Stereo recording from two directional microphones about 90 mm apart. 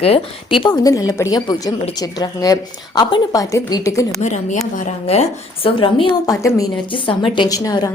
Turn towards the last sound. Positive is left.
turn(degrees=45)  # may be behind; listen again after turning